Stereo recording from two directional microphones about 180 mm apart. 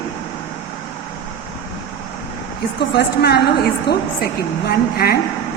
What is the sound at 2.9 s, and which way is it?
A woman's voice, 65° left (ahead or behind).